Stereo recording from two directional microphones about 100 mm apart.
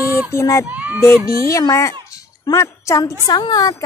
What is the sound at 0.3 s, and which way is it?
A woman's voice, 30° left (ahead or behind).